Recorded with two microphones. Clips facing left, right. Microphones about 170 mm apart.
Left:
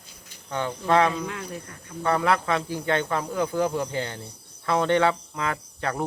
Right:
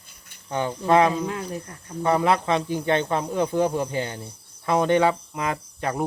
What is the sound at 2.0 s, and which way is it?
A man's voice, 20° right (ahead or behind).